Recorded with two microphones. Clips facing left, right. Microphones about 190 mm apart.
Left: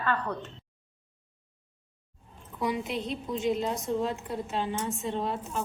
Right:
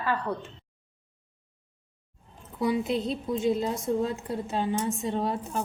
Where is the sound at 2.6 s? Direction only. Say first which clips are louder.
Right 4 dB; 35° right (ahead or behind).